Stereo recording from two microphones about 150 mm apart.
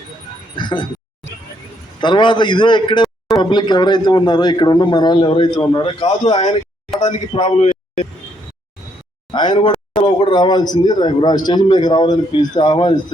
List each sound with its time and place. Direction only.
0.5 s a man's voice: 30° left (ahead or behind)
2.0 s a man's voice: 30° left (ahead or behind)
9.3 s a man's voice: 30° left (ahead or behind)